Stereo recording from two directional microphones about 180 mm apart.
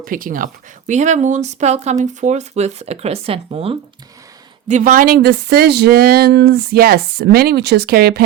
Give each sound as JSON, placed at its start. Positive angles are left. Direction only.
{"t": 0.0, "sound": "speech", "side_deg": -50}
{"t": 4.7, "sound": "speech", "side_deg": -50}